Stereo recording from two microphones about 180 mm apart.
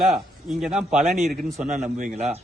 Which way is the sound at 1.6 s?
45° right (ahead or behind).